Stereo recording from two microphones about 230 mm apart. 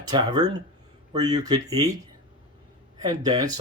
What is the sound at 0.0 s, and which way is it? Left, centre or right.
Speech, centre.